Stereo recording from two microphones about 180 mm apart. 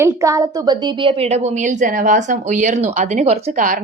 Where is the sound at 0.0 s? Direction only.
15° right (ahead or behind).